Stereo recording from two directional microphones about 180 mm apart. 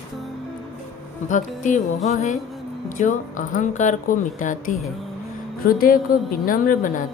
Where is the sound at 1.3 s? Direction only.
45° left (ahead or behind).